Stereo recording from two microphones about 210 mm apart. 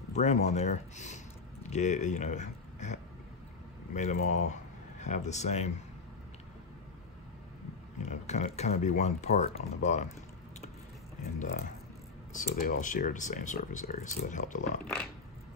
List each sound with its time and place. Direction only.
0.1 s speech: 30° left (ahead or behind)
8.1 s speech: 35° left (ahead or behind)
11.3 s speech: 45° left (ahead or behind)